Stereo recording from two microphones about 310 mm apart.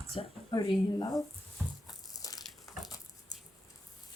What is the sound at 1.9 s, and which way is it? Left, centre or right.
Crushing, centre.